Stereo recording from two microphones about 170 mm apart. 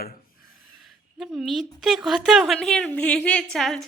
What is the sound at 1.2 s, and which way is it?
A woman's voice, centre (ahead or behind).